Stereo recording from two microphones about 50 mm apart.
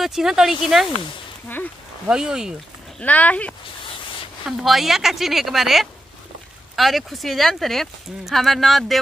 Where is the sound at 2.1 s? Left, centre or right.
Centre.